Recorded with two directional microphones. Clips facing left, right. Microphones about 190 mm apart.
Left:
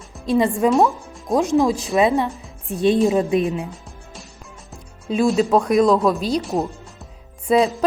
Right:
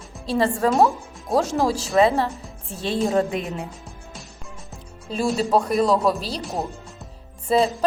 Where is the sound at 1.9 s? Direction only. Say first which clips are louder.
Right 1 dB; 15° left (ahead or behind).